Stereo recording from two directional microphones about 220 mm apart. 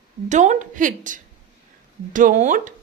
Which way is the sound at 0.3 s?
30° right (ahead or behind).